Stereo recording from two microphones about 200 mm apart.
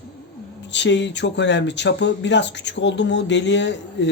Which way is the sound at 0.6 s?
60° left (ahead or behind).